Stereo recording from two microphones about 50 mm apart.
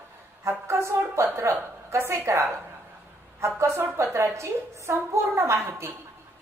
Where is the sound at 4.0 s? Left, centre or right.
Right.